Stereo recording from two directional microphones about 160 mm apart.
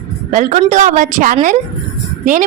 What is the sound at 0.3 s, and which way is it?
A woman's voice, 50° right (ahead or behind).